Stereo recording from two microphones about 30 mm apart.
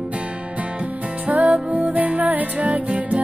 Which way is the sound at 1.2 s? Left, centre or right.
Right.